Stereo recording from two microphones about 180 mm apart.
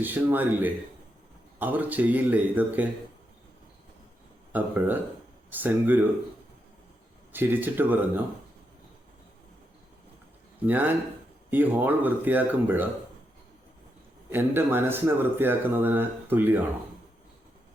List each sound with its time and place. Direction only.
0.0 s speech: 10° right (ahead or behind)
4.5 s speech: 10° right (ahead or behind)
7.3 s speech: 10° right (ahead or behind)
10.7 s speech: 10° right (ahead or behind)
14.3 s speech: 10° right (ahead or behind)